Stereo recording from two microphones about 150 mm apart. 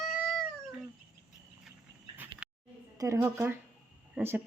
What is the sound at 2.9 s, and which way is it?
Speech, 20° right (ahead or behind).